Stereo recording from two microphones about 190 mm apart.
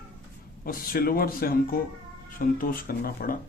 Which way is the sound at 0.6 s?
50° left (ahead or behind).